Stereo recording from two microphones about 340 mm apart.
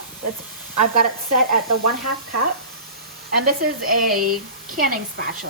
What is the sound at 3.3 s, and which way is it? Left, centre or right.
Speech, right.